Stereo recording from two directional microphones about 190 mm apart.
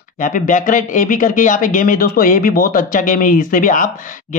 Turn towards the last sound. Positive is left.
turn(degrees=45)  # may be behind; listen again after turning